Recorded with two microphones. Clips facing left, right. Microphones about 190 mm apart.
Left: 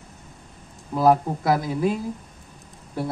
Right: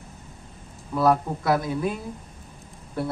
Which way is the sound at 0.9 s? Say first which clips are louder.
Left 3 dB; 30° left (ahead or behind).